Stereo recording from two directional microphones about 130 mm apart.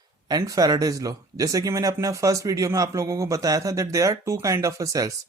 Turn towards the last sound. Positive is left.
turn(degrees=-25)  # may be behind; listen again after turning